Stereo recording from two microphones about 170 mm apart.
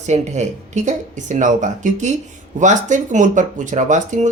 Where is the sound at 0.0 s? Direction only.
45° right (ahead or behind).